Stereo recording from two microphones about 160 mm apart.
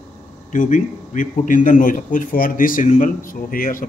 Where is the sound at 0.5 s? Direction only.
50° left (ahead or behind).